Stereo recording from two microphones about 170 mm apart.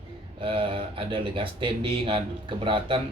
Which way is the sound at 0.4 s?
30° right (ahead or behind).